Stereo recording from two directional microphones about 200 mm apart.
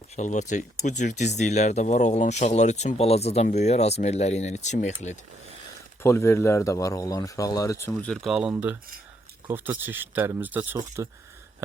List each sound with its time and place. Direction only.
0.2 s speech: 35° left (ahead or behind)
6.0 s speech: 10° left (ahead or behind); by 11.1 s 15° right (ahead or behind)